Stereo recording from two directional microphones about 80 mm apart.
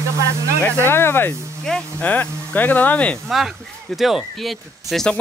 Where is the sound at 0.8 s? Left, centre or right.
Left.